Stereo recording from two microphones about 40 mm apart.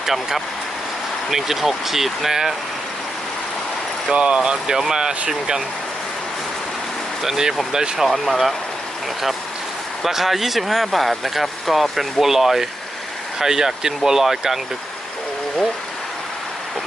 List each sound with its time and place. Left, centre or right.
0.0 s speech: centre
4.1 s speech: right
7.2 s speech: centre
8.0 s speech: centre
10.0 s speech: centre